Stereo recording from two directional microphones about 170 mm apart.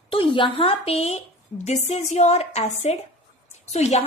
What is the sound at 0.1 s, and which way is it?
A woman's voice, 30° left (ahead or behind).